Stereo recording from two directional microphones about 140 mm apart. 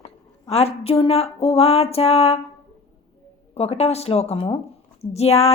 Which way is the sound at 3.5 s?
45° left (ahead or behind).